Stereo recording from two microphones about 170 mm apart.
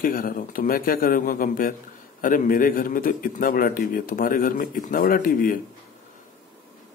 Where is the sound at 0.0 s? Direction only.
55° left (ahead or behind).